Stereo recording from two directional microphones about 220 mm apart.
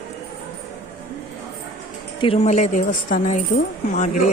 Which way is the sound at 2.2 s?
30° left (ahead or behind).